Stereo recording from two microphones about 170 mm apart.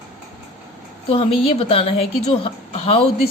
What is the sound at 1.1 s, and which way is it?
A woman's voice, 35° left (ahead or behind).